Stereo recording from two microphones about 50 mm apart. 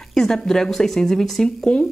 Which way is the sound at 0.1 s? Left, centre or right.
Centre.